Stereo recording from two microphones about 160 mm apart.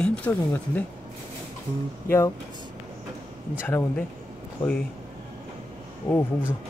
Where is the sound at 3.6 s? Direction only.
10° left (ahead or behind).